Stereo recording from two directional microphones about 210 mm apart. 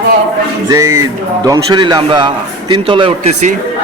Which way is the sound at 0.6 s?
15° right (ahead or behind).